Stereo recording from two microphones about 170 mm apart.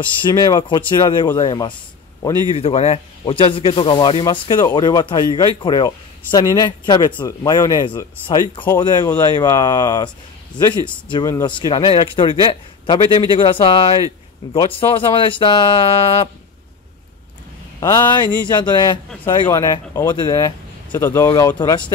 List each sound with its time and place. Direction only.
0.2 s speech: 25° left (ahead or behind)
17.7 s speech: 20° left (ahead or behind)
21.5 s speech: 25° left (ahead or behind)